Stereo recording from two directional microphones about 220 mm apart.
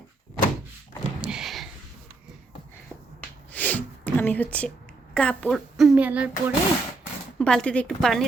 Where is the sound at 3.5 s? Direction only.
5° left (ahead or behind).